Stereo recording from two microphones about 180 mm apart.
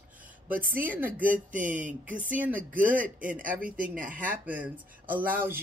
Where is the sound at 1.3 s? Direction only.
45° right (ahead or behind).